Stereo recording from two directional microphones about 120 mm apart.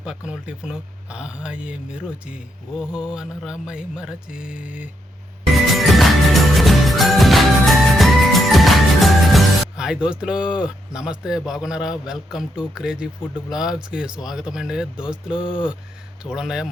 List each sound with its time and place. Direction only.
0.0 s speech: 10° right (ahead or behind)
2.9 s a sound: 40° left (ahead or behind)
3.2 s speech: 5° right (ahead or behind)
5.6 s music: centre (ahead or behind)
15.4 s speech: 5° right (ahead or behind)